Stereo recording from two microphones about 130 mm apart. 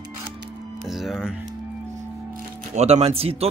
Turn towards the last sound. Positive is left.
turn(degrees=-50)  # may be behind; listen again after turning